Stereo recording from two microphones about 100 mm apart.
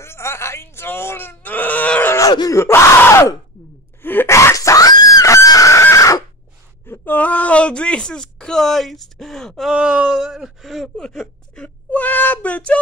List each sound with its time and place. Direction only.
0.0 s groan: 25° left (ahead or behind)
2.5 s speech: 25° left (ahead or behind)
4.0 s screaming: 20° left (ahead or behind)
6.9 s speech: 20° left (ahead or behind); by 9.7 s 5° left (ahead or behind)
9.7 s speech: 10° right (ahead or behind); by 12.8 s 15° left (ahead or behind)